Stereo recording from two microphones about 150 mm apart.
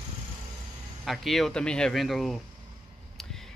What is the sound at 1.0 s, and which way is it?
Speech, centre (ahead or behind).